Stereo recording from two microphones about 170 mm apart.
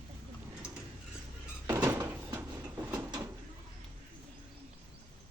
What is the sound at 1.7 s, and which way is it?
Squeak, 15° right (ahead or behind).